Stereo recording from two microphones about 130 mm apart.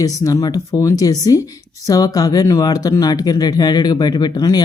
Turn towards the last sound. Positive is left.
turn(degrees=30)  # may be behind; listen again after turning